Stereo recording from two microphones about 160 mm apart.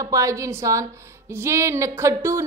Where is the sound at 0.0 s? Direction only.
20° right (ahead or behind).